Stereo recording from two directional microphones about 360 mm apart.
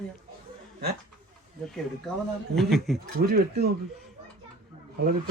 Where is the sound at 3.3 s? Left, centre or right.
Right.